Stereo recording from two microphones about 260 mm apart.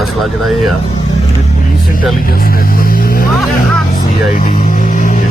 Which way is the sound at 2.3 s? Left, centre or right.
Left.